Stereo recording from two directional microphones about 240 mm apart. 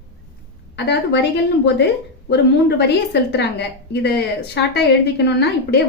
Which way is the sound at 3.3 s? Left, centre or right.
Left.